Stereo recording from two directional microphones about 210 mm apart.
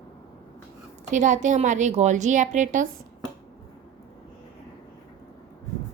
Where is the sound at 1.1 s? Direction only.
35° right (ahead or behind).